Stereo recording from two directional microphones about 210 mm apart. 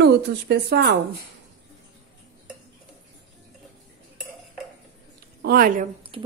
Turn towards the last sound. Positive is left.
turn(degrees=-25)  # may be behind; listen again after turning